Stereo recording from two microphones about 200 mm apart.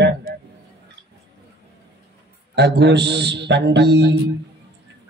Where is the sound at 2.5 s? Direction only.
60° right (ahead or behind).